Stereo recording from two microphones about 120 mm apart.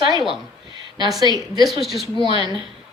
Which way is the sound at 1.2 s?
35° right (ahead or behind).